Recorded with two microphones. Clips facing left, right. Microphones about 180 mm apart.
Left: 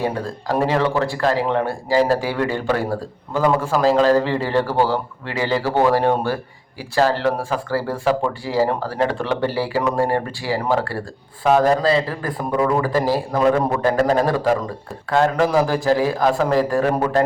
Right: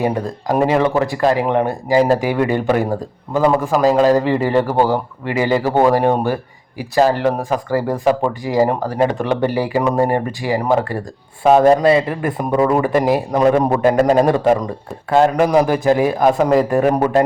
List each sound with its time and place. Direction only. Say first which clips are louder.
0.0 s a man's voice: right 4 dB; 15° right (ahead or behind)